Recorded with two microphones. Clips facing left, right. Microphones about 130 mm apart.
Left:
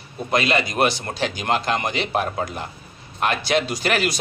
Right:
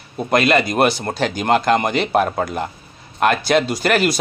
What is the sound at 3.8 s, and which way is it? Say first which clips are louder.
Speech: right 5 dB; 45° right (ahead or behind).